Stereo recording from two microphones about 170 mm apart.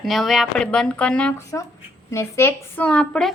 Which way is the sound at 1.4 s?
20° left (ahead or behind).